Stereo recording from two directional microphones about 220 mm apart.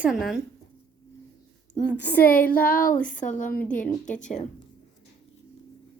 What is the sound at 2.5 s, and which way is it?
Speech, 40° left (ahead or behind).